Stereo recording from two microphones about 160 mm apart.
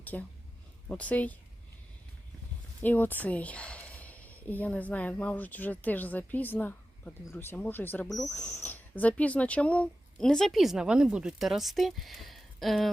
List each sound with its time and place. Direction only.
0.0 s speech: 10° left (ahead or behind)
2.8 s speech: 10° left (ahead or behind)